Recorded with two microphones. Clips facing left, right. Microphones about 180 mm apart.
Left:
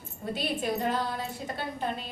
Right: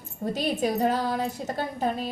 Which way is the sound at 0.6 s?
40° right (ahead or behind).